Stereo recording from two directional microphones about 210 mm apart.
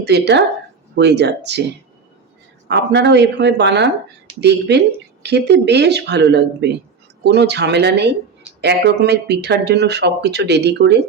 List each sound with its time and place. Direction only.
0.0 s speech: 55° right (ahead or behind)
2.6 s speech: 55° right (ahead or behind)